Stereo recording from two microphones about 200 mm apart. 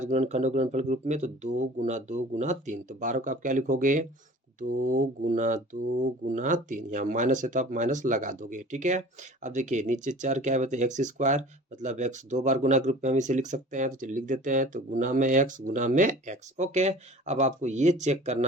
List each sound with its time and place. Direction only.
0.0 s speech: 35° right (ahead or behind)